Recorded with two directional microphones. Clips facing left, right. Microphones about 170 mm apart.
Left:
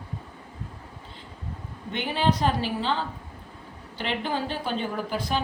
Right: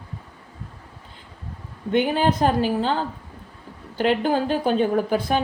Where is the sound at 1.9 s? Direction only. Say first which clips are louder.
Right 6 dB; 45° right (ahead or behind).